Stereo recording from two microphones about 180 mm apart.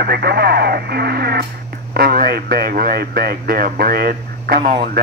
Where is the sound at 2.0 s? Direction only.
55° right (ahead or behind).